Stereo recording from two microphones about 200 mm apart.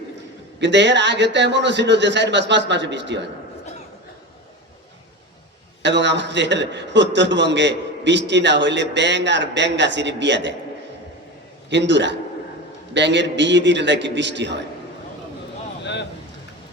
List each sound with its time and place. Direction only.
0.6 s a man's voice: 60° right (ahead or behind)
5.8 s a man's voice: 60° right (ahead or behind)
11.7 s a man's voice: 60° right (ahead or behind)
15.8 s a sound: 60° left (ahead or behind)